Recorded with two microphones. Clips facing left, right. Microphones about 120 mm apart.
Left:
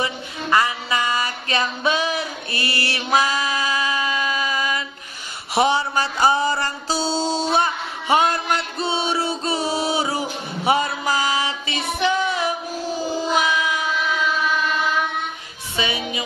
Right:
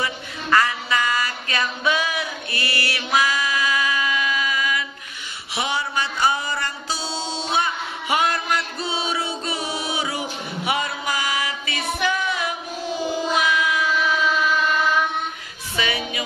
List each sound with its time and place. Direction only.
0.0 s a sound: 20° left (ahead or behind)
5.5 s music: 35° left (ahead or behind)
13.3 s child singing: 30° left (ahead or behind)
15.7 s music: 20° left (ahead or behind)